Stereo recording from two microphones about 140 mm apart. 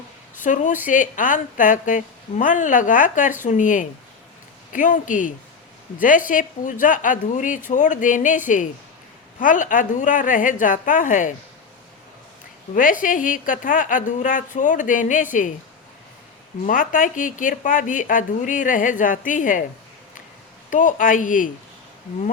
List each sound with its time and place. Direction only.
0.4 s a woman's voice: 65° left (ahead or behind)
12.7 s a woman's voice: 75° left (ahead or behind)
16.6 s a woman's voice: 80° left
20.7 s a woman's voice: 70° left (ahead or behind)